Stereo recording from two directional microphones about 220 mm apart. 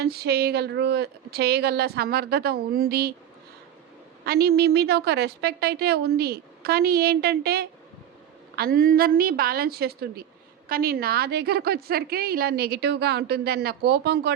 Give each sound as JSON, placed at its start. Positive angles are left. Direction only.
{"t": 0.0, "sound": "a woman's voice", "side_deg": -45}
{"t": 4.3, "sound": "a woman's voice", "side_deg": -45}